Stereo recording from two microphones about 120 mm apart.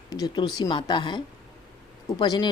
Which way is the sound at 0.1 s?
35° left (ahead or behind).